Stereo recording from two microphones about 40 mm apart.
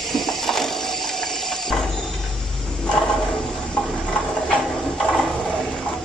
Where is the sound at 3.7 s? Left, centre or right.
Left.